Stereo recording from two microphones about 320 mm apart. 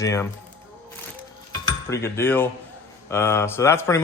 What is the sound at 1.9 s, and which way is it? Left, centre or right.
Speech, centre.